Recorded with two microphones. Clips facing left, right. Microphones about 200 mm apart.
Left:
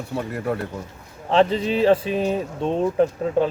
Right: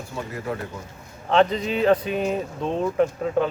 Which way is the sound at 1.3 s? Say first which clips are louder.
Left 1 dB; 30° left (ahead or behind).